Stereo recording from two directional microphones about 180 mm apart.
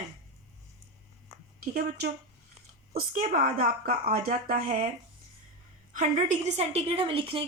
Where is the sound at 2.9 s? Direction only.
50° right (ahead or behind).